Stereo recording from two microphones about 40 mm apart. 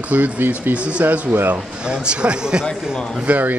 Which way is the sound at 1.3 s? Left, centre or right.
Right.